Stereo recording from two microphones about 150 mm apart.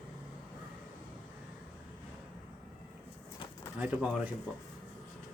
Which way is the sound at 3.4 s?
35° left (ahead or behind).